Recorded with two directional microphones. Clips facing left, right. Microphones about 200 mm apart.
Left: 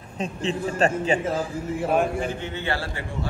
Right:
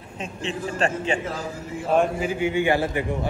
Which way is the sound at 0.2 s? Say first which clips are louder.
Left 3 dB; 35° left (ahead or behind).